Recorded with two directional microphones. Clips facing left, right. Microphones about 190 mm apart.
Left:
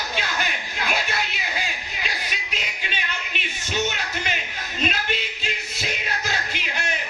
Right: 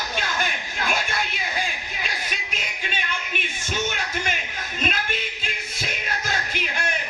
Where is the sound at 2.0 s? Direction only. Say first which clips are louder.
Left 1 dB; 50° right (ahead or behind).